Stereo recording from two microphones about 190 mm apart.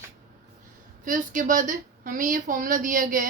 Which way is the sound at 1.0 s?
45° right (ahead or behind).